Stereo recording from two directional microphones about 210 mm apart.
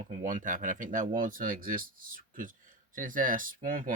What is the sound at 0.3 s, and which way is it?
Speech, 40° right (ahead or behind).